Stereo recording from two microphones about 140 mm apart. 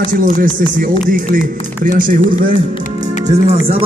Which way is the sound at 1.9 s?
75° right (ahead or behind).